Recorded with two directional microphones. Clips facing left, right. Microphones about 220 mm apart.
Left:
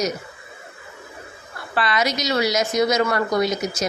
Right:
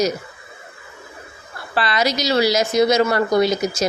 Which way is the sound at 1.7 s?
35° right (ahead or behind).